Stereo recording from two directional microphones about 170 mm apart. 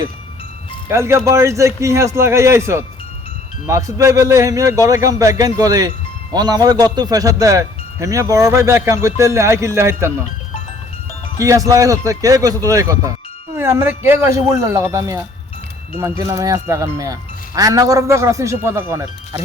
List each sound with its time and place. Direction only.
0.9 s a man's voice: 15° right (ahead or behind)
11.3 s a man's voice: 20° right (ahead or behind)